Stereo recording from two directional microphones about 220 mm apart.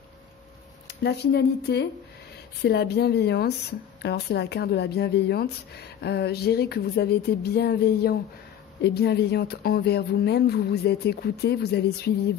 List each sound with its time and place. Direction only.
0.8 s speech: 50° left (ahead or behind)